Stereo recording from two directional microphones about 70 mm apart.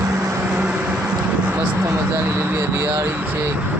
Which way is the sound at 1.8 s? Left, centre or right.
Right.